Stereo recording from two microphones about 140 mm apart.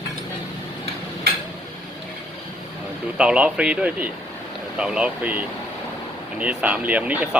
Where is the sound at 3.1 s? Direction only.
10° right (ahead or behind).